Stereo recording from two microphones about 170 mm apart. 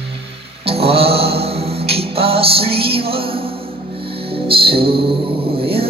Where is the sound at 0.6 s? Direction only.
35° right (ahead or behind).